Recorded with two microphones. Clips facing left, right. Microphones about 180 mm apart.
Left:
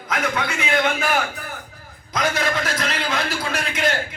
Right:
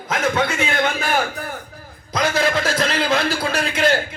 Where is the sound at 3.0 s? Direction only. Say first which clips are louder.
Right 5 dB; 30° right (ahead or behind).